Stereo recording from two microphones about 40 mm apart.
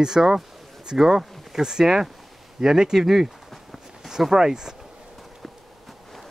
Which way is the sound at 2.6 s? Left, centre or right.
Centre.